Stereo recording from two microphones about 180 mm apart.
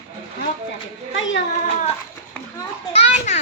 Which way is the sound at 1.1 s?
90° left.